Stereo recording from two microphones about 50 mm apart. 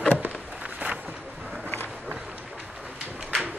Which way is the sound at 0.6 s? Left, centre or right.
Right.